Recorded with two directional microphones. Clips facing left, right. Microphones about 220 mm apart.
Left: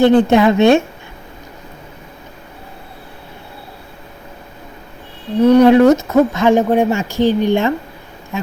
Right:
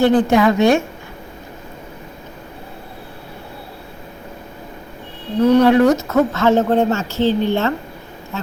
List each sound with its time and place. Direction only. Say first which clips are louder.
0.0 s a woman's voice: left 3 dB; 25° left (ahead or behind)
5.4 s speech: left 3 dB; 10° left (ahead or behind)